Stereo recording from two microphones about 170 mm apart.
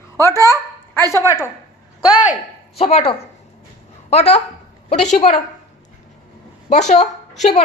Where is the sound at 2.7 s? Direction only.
35° left (ahead or behind).